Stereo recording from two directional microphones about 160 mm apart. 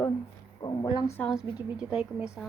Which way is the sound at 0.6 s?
25° left (ahead or behind).